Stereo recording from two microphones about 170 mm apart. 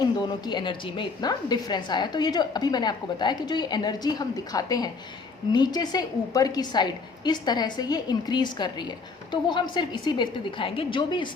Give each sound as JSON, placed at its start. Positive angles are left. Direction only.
{"t": 0.0, "sound": "a woman's voice", "side_deg": 25}